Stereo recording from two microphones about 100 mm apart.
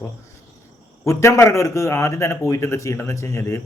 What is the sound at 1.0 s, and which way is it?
Speech, 30° left (ahead or behind).